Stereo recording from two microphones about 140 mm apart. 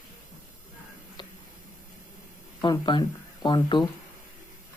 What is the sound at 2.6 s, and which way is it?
Speech, 35° left (ahead or behind).